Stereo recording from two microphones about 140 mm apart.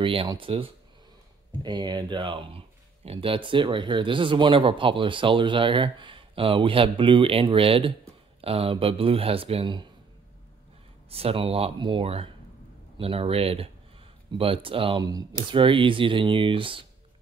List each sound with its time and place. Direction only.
0.0 s speech: 40° right (ahead or behind)
11.1 s speech: 45° right (ahead or behind)